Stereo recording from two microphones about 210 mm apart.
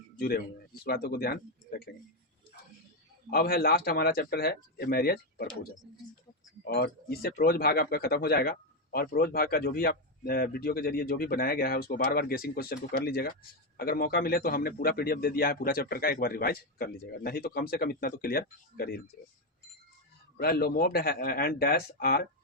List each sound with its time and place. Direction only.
0.2 s speech: 45° left (ahead or behind)
3.2 s speech: 45° left (ahead or behind)
6.7 s speech: 50° left (ahead or behind)
20.3 s speech: 45° left (ahead or behind)